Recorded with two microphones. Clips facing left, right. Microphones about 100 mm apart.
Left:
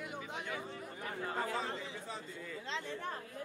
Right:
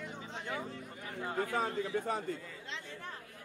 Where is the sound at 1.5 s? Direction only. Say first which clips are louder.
Right 6 dB; 55° right (ahead or behind).